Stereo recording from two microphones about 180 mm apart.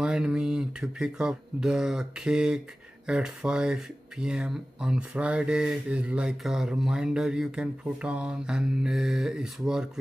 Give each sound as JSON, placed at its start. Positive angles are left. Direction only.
{"t": 0.0, "sound": "speech", "side_deg": -5}